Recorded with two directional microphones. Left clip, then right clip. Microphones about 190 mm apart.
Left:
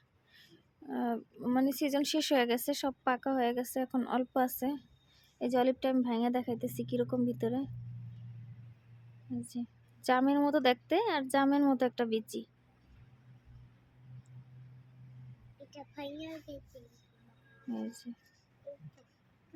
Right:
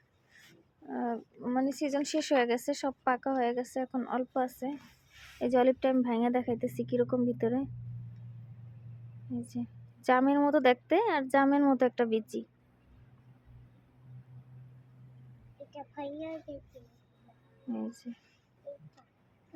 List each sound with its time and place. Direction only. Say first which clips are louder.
0.9 s speech: right 1 dB; 20° left (ahead or behind)
5.4 s a woman's voice: right 4 dB; centre (ahead or behind)
9.4 s a woman's voice: right 2 dB; centre (ahead or behind)
15.7 s a sound: right 3 dB; 10° left (ahead or behind)
17.7 s a woman's voice: right 2 dB; centre (ahead or behind)